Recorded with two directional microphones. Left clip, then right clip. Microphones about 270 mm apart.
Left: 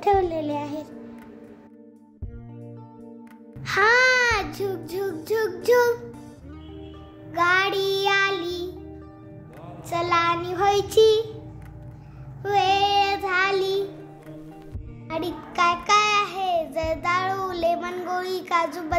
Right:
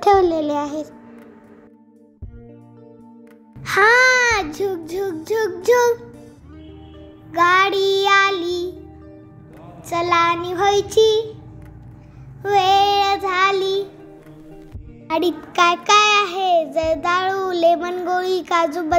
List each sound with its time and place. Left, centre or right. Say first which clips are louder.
0.0 s child singing: right 7 dB; centre
3.6 s a sound: right 5 dB; centre
5.1 s child singing: right 3 dB; centre
7.3 s music: right 6 dB; centre
9.8 s child singing: right 5 dB; centre
12.4 s child singing: right 6 dB; centre
15.0 s child singing: right 9 dB; right